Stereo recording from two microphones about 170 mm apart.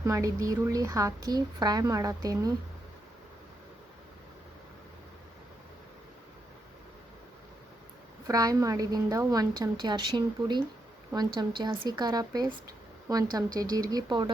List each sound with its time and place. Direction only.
0.0 s a woman's voice: 20° right (ahead or behind)
8.3 s a woman's voice: 20° right (ahead or behind)